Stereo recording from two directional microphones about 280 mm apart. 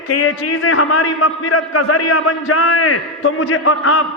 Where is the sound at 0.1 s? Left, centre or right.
Left.